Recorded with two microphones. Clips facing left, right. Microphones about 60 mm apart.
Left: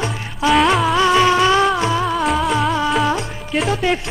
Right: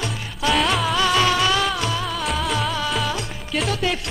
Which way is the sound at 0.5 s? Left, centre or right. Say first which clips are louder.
Left 6 dB; centre.